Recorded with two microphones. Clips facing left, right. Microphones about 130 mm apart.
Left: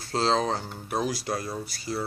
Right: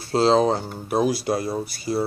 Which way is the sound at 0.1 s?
10° right (ahead or behind).